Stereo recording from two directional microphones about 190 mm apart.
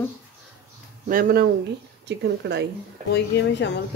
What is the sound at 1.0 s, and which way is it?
Speech, 45° right (ahead or behind).